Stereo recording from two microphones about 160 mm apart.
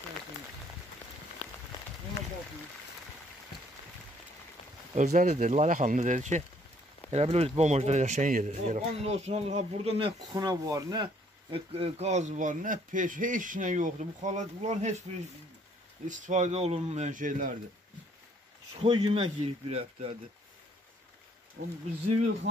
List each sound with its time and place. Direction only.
1.4 s rain on surface: 40° left (ahead or behind)
4.9 s speech: 50° right (ahead or behind)
10.3 s speech: 25° right (ahead or behind)
11.5 s speech: 35° right (ahead or behind)
16.1 s speech: 50° right (ahead or behind)
18.8 s speech: 35° right (ahead or behind)
21.6 s speech: 90° right